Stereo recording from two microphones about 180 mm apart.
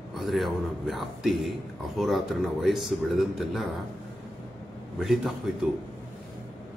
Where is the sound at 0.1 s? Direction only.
Centre (ahead or behind).